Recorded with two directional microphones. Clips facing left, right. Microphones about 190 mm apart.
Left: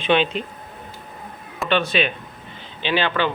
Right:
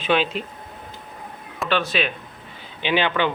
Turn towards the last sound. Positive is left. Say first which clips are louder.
# even
turn(degrees=-15)  # may be behind; listen again after turning